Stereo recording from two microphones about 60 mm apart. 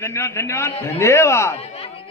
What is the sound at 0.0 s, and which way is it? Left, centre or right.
A man's voice, left.